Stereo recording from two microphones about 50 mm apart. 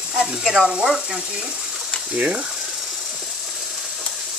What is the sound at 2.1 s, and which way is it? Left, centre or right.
Speech, right.